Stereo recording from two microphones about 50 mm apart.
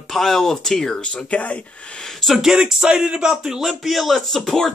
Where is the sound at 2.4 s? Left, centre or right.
Centre.